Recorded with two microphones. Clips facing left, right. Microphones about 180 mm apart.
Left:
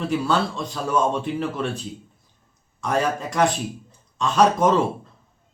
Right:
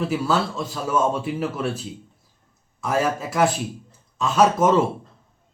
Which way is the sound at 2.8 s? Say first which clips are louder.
Even; 5° right (ahead or behind).